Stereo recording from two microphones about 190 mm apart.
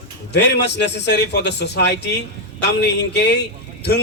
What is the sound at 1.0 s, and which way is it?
A man's voice, 60° left (ahead or behind).